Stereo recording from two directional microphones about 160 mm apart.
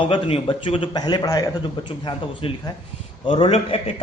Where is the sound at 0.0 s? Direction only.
35° left (ahead or behind).